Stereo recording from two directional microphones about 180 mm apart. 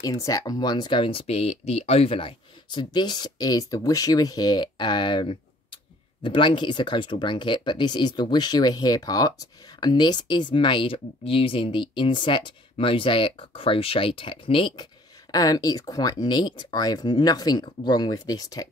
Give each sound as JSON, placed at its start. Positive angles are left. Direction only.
{"t": 0.0, "sound": "speech", "side_deg": 20}